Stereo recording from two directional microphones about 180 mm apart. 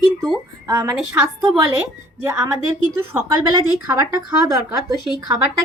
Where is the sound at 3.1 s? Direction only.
15° right (ahead or behind).